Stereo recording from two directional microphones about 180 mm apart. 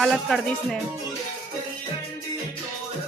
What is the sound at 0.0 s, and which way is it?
Speech, centre (ahead or behind).